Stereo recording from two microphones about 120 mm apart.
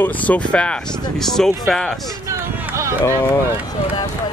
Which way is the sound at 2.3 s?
25° right (ahead or behind).